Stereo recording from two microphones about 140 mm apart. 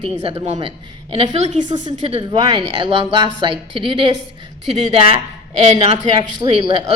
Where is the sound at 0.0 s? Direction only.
40° right (ahead or behind).